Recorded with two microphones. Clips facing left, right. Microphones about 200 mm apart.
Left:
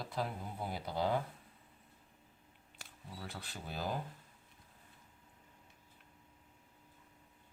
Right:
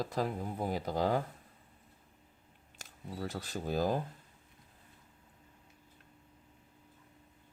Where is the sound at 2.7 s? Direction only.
45° right (ahead or behind).